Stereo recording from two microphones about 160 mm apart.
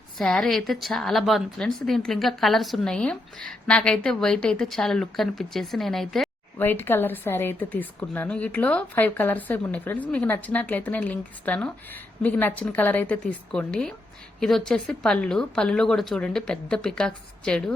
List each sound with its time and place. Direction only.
0.2 s a woman's voice: 5° left (ahead or behind)
6.6 s a woman's voice: 15° left (ahead or behind)